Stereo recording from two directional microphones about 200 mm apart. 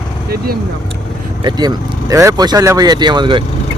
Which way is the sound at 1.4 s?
20° right (ahead or behind).